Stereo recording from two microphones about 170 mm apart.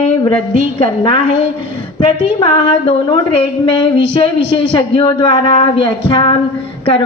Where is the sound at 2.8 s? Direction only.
30° left (ahead or behind).